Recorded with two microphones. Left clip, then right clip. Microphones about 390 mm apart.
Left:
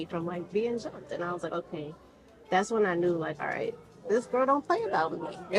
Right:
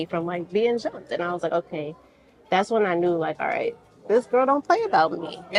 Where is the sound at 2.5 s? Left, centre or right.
Right.